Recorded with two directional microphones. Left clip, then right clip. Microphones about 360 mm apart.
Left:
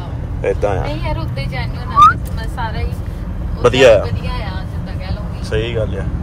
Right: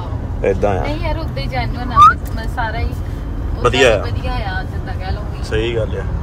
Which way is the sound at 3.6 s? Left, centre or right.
Centre.